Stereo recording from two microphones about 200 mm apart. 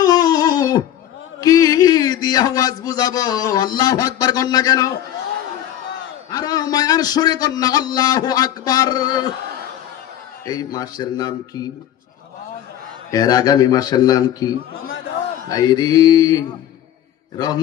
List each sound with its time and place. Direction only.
0.0 s a sound: 20° left (ahead or behind)
1.4 s a man's voice: 20° left (ahead or behind)
6.3 s a man's voice: 20° left (ahead or behind)
10.4 s a man's voice: 20° left (ahead or behind)
13.1 s a man's voice: 20° left (ahead or behind)